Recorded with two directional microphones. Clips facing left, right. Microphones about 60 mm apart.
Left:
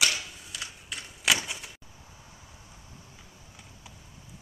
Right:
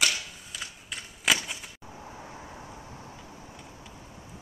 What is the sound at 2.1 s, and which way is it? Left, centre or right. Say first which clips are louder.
Vehicle: right 10 dB; right.